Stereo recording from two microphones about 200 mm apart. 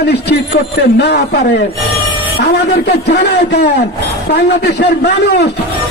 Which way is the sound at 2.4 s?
55° left (ahead or behind).